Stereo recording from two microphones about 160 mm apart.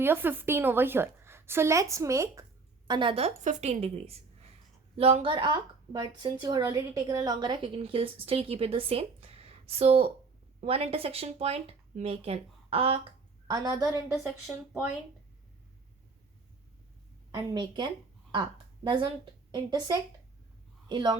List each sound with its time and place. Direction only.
0.0 s a woman's voice: 15° right (ahead or behind)
2.8 s a woman's voice: 30° right (ahead or behind)
13.5 s a woman's voice: 20° right (ahead or behind)
14.7 s a woman's voice: 10° right (ahead or behind)
17.3 s a woman's voice: 25° right (ahead or behind)